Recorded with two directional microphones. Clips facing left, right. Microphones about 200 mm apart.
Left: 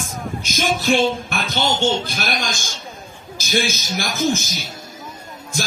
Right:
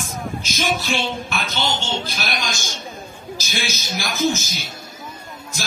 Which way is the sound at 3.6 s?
50° left (ahead or behind).